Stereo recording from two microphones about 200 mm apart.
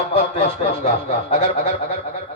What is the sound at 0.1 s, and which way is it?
A man's voice, 30° left (ahead or behind).